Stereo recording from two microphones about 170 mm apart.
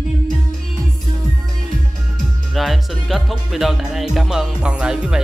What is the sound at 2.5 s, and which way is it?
Speech, centre (ahead or behind).